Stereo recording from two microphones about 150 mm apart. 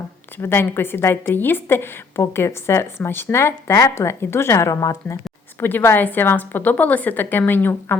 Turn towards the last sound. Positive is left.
turn(degrees=15)  # may be behind; listen again after turning